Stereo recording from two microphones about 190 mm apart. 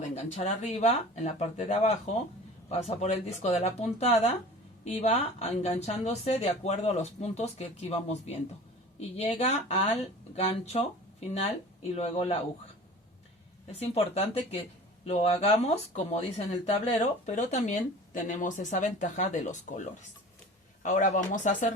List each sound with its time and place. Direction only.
0.2 s speech: 35° left (ahead or behind)
13.7 s speech: 30° left (ahead or behind)